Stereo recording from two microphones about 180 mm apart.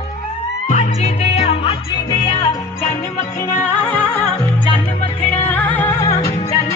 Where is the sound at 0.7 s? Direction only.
40° left (ahead or behind).